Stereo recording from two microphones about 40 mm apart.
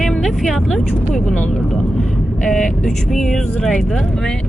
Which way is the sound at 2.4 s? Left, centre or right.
Centre.